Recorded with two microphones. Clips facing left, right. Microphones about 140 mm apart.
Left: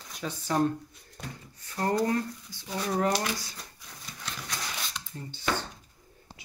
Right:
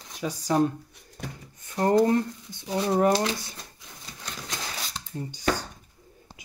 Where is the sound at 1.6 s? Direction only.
25° right (ahead or behind).